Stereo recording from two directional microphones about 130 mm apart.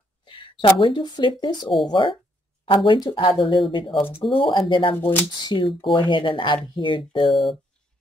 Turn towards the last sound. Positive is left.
turn(degrees=40)  # may be behind; listen again after turning